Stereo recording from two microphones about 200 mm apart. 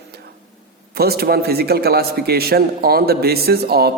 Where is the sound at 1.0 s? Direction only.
50° right (ahead or behind).